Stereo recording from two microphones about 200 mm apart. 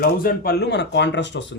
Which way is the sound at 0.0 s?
50° left (ahead or behind).